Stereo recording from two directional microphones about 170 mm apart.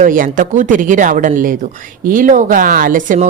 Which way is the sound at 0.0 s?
50° right (ahead or behind).